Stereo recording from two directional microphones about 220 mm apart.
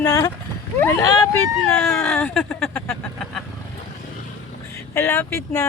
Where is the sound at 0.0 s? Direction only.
15° left (ahead or behind).